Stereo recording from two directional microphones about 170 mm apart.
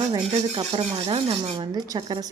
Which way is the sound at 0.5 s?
30° right (ahead or behind).